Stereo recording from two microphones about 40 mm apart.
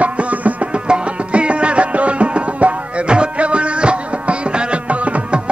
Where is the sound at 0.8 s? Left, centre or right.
Right.